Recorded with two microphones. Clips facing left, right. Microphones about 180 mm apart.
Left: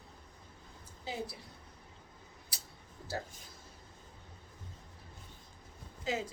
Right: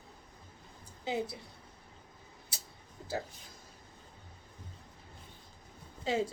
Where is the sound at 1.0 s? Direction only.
20° right (ahead or behind).